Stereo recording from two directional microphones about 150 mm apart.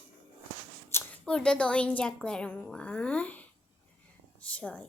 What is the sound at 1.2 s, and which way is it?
A child's voice, 5° left (ahead or behind).